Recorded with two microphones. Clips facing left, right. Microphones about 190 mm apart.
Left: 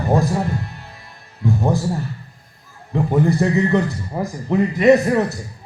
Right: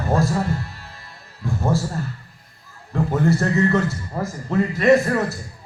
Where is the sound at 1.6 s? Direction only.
15° left (ahead or behind).